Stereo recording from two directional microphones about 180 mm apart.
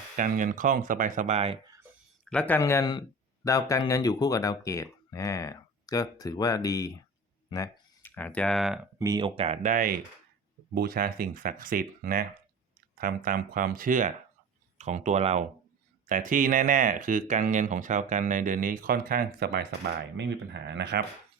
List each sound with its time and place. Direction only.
0.2 s speech: 45° right (ahead or behind)
1.6 s a sound: 20° right (ahead or behind)
2.3 s speech: 5° left (ahead or behind)
9.0 s speech: 20° right (ahead or behind)
9.7 s speech: 50° right (ahead or behind); by 21.0 s 70° right (ahead or behind)